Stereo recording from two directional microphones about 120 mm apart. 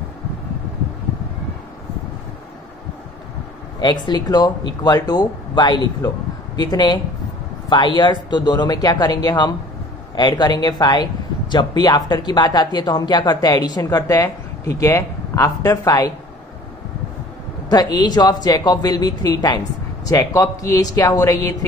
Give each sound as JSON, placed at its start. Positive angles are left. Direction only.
{"t": 3.8, "sound": "speech", "side_deg": 35}
{"t": 17.6, "sound": "speech", "side_deg": 35}